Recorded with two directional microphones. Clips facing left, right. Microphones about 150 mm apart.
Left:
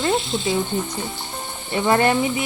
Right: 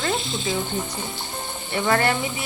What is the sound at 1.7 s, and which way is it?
Speech, 25° left (ahead or behind).